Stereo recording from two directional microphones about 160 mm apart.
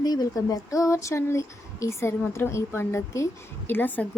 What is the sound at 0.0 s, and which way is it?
A woman's voice, 25° left (ahead or behind).